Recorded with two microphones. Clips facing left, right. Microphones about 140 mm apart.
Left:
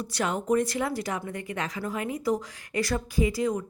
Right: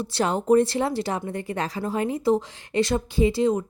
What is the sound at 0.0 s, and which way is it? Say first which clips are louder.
A woman's voice: right 5 dB; 30° right (ahead or behind).